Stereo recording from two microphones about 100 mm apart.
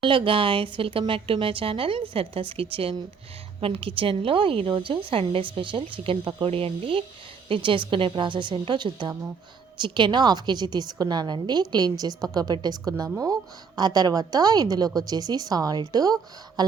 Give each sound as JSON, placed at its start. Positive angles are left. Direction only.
{"t": 0.0, "sound": "a woman's voice", "side_deg": -60}
{"t": 7.4, "sound": "a woman's voice", "side_deg": -60}